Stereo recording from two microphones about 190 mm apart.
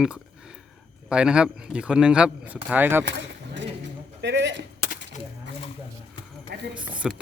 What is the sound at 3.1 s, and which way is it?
Speech, 70° right (ahead or behind).